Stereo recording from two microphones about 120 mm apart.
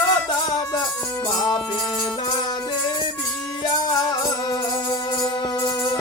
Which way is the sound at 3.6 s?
35° left (ahead or behind).